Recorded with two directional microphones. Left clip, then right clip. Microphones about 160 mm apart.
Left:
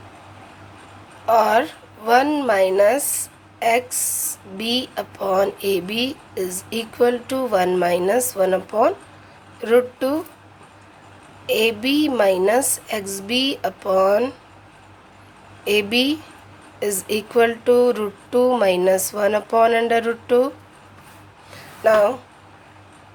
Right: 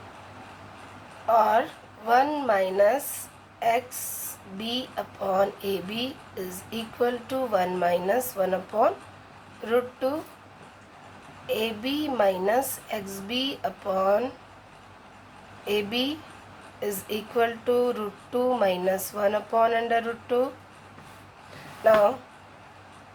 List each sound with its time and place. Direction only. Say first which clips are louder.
1.3 s speech: left 5 dB; 50° left (ahead or behind)
11.4 s speech: left 9 dB; 55° left (ahead or behind)
15.6 s speech: left 8 dB; 50° left (ahead or behind)
21.8 s speech: left 4 dB; 40° left (ahead or behind)